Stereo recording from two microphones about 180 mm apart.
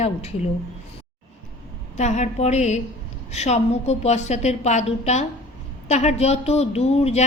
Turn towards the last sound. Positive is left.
turn(degrees=35)  # may be behind; listen again after turning